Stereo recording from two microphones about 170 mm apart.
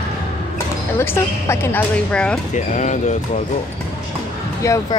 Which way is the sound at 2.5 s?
45° left (ahead or behind).